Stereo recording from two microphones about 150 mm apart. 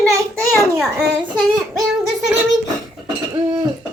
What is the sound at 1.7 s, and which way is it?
Child singing, centre (ahead or behind).